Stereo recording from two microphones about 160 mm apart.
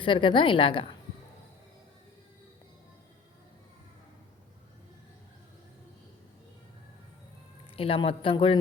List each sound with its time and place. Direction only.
0.0 s a woman's voice: 30° left (ahead or behind)
7.8 s a woman's voice: 35° left (ahead or behind)